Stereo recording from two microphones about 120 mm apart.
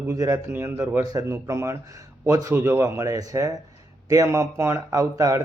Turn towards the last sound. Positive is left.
turn(degrees=-25)  # may be behind; listen again after turning